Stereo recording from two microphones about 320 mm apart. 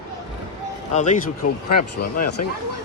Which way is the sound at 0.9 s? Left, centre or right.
Left.